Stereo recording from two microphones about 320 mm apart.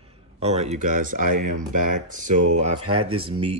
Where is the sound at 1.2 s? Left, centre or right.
Right.